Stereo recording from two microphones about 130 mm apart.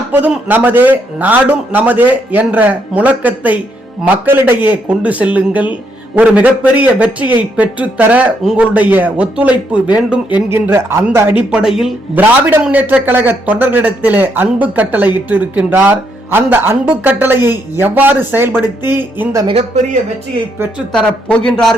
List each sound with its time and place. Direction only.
0.1 s a man's voice: 15° right (ahead or behind)
20.9 s a man's voice: 5° left (ahead or behind)